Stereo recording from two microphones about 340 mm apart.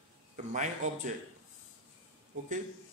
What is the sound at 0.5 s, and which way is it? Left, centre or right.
Speech, right.